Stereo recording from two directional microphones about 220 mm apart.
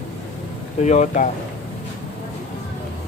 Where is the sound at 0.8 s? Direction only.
30° left (ahead or behind).